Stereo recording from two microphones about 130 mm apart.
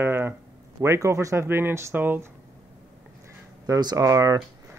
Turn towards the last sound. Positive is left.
turn(degrees=-25)  # may be behind; listen again after turning